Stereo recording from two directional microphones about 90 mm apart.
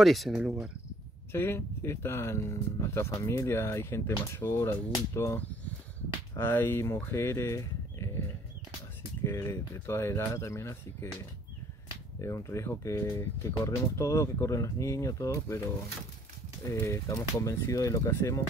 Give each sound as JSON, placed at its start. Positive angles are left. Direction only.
{"t": 0.0, "sound": "speech", "side_deg": 0}
{"t": 1.3, "sound": "speech", "side_deg": 25}
{"t": 9.2, "sound": "speech", "side_deg": 35}
{"t": 12.2, "sound": "speech", "side_deg": 30}
{"t": 16.7, "sound": "speech", "side_deg": 30}